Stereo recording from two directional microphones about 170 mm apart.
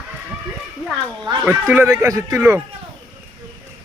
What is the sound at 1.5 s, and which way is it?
Speech, 10° right (ahead or behind).